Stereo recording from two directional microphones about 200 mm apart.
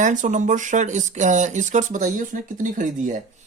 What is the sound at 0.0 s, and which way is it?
Speech, 40° right (ahead or behind).